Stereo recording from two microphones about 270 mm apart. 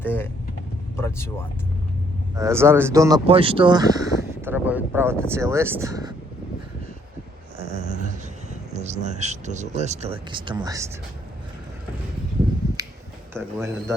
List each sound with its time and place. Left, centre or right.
0.0 s speech: centre
2.3 s speech: centre
7.6 s dog: right
8.7 s speech: right
13.3 s speech: centre